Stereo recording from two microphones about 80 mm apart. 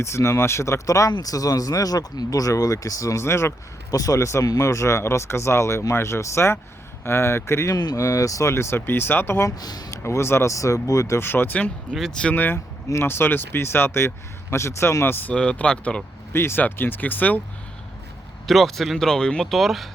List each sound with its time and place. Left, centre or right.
0.0 s speech: left
3.9 s speech: left
9.6 s speech: left
9.9 s speech: left
11.3 s speech: left
11.9 s speech: centre
12.3 s speech: left
15.4 s speech: centre
16.3 s speech: left
18.4 s speech: centre